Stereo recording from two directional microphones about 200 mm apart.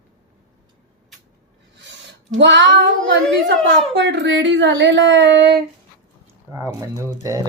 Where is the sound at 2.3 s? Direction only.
65° right (ahead or behind).